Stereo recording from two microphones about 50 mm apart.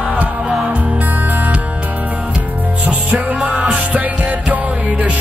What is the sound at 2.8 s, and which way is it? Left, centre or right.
Music, right.